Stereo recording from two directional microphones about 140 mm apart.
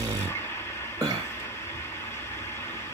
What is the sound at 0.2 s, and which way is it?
Vehicle, 15° left (ahead or behind).